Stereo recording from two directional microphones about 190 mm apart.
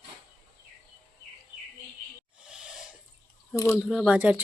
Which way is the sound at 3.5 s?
15° left (ahead or behind).